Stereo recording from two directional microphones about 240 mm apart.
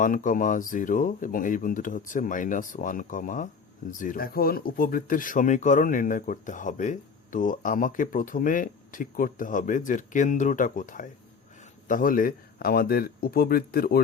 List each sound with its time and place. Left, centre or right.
0.0 s speech: left